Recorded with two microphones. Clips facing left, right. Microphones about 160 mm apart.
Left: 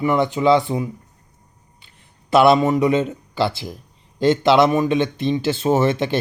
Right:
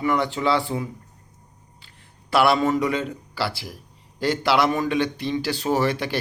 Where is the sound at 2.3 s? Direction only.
20° left (ahead or behind).